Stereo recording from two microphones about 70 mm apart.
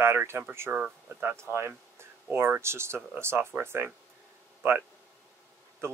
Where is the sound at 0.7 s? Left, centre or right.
Centre.